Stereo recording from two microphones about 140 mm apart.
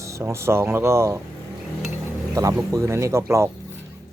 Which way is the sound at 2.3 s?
25° right (ahead or behind).